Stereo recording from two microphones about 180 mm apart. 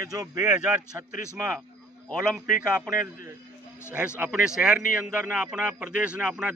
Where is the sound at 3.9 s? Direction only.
10° right (ahead or behind).